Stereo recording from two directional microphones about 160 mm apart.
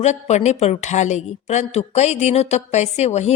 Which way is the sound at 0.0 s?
45° left (ahead or behind).